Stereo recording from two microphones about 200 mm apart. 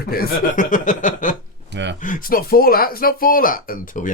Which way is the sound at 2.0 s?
40° left (ahead or behind).